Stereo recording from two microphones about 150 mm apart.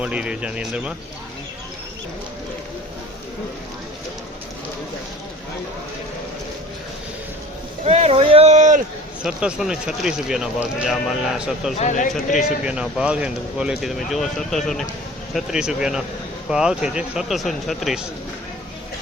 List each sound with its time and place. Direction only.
0.0 s speech: 5° right (ahead or behind)
7.9 s speech: 45° right (ahead or behind)
9.2 s speech: 5° right (ahead or behind)
11.8 s speech: 55° left (ahead or behind)
12.6 s speech: 5° right (ahead or behind)